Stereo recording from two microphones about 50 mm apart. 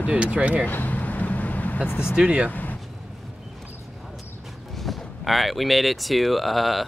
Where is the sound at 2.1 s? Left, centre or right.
Right.